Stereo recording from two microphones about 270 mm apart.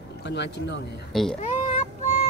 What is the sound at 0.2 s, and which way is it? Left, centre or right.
Speech, left.